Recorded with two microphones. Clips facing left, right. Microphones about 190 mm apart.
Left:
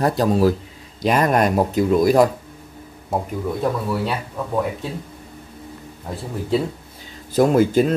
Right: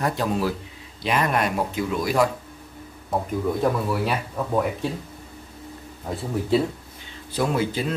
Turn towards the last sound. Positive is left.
turn(degrees=45)  # may be behind; listen again after turning